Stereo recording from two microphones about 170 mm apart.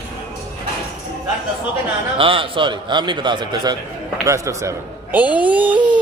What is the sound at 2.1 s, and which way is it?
A man's voice, 30° right (ahead or behind).